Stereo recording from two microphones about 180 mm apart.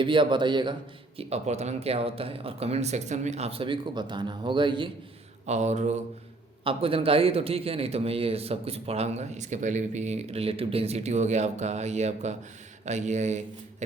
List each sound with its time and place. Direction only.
0.0 s a man's voice: 25° right (ahead or behind)
5.5 s a man's voice: 40° right (ahead or behind)